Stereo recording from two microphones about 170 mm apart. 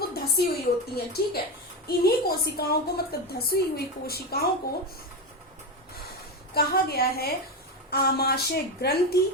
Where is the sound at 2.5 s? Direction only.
65° left (ahead or behind).